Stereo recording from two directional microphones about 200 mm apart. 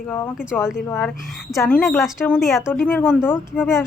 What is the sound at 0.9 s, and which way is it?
Speech, 5° left (ahead or behind).